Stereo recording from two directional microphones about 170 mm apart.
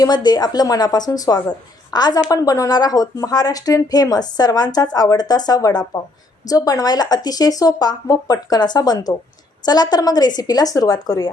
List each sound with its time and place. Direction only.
0.0 s a woman's voice: 25° left (ahead or behind)